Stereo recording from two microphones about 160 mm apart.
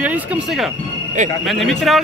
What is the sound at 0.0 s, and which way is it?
A man's voice, 10° right (ahead or behind).